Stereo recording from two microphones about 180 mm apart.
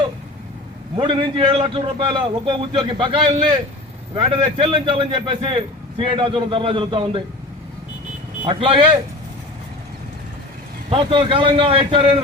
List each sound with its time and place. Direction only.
0.9 s a man's voice: 30° right (ahead or behind)
8.4 s speech: 30° right (ahead or behind)
10.8 s a man's voice: 30° right (ahead or behind)